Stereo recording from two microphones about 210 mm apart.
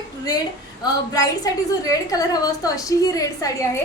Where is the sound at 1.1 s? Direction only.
15° left (ahead or behind).